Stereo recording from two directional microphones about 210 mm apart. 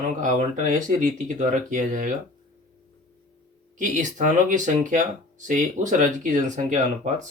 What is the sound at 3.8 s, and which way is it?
Speech, 35° right (ahead or behind).